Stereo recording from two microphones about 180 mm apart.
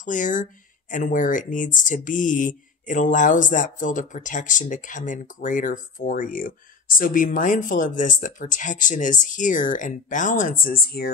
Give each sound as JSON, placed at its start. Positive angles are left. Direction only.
{"t": 0.0, "sound": "speech", "side_deg": 45}